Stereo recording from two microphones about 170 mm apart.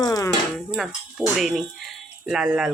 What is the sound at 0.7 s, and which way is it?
Speech, centre (ahead or behind).